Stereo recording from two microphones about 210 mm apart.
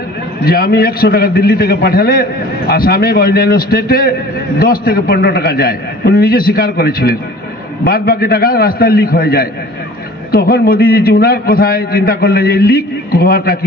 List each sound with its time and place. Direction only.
0.5 s a man's voice: 45° left (ahead or behind)